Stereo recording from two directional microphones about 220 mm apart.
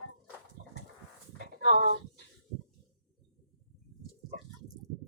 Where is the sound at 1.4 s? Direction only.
45° right (ahead or behind).